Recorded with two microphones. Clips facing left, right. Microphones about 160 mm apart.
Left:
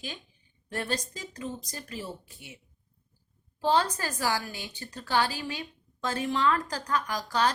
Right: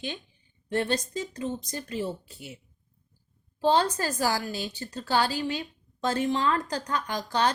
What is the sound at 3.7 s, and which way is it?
A woman's voice, 30° right (ahead or behind).